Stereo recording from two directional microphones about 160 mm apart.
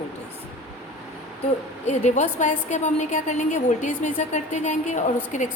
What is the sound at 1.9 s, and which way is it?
A woman's voice, 50° left (ahead or behind).